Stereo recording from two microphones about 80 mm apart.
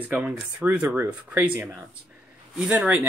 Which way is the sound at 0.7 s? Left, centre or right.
Right.